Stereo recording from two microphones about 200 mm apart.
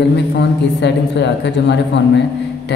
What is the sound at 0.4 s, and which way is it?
Speech, 60° left (ahead or behind).